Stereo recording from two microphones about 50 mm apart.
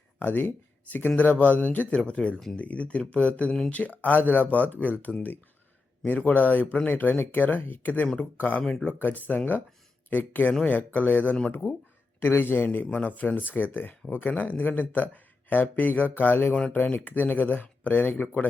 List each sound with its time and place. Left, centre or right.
0.2 s speech: left
2.0 s speech: left
11.6 s speech: left
16.7 s speech: left
18.1 s speech: left